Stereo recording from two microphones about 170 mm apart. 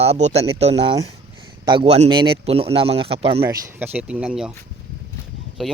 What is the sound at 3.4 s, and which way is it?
Speech, 10° right (ahead or behind).